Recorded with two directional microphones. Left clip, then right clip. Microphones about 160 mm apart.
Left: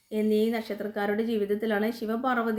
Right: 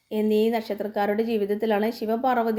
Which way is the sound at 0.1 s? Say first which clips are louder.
Right 4 dB; 20° right (ahead or behind).